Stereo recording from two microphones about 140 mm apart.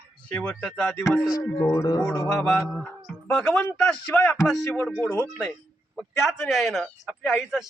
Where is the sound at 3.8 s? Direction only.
10° left (ahead or behind).